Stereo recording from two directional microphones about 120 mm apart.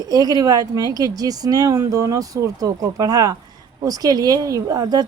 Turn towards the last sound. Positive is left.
turn(degrees=-30)  # may be behind; listen again after turning